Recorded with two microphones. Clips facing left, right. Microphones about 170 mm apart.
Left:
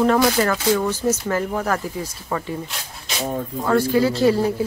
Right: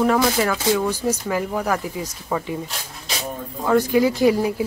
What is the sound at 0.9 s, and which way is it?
Speech, 10° right (ahead or behind).